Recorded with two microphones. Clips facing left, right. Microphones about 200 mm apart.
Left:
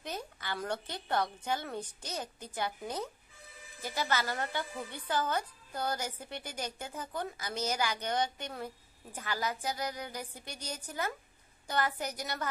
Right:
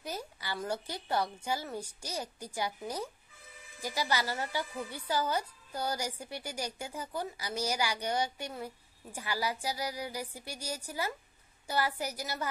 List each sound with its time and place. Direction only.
0.0 s a woman's voice: 10° right (ahead or behind)